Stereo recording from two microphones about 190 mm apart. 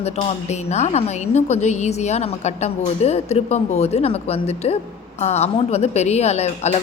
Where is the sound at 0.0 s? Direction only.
35° left (ahead or behind).